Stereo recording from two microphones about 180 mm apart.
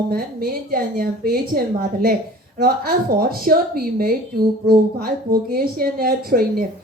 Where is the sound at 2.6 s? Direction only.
55° right (ahead or behind).